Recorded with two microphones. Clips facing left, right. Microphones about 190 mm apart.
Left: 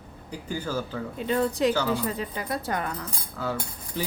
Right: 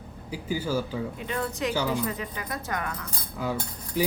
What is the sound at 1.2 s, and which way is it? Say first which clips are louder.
Speech: left 8 dB; 30° left (ahead or behind).